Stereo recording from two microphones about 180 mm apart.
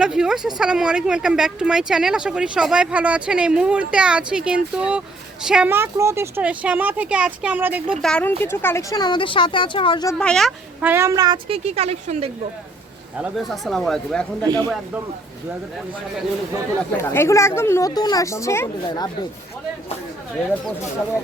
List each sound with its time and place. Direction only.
0.0 s speech: 5° right (ahead or behind)
8.0 s speech: 5° left (ahead or behind); by 10.1 s 25° left (ahead or behind)
10.2 s speech: 5° left (ahead or behind)
10.8 s a woman's voice: 10° right (ahead or behind); by 12.3 s 35° right (ahead or behind)
13.1 s speech: 5° right (ahead or behind)
14.4 s speech: 25° right (ahead or behind)
17.0 s speech: 15° left (ahead or behind)